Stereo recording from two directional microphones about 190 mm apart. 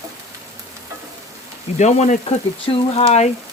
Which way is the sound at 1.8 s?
35° left (ahead or behind).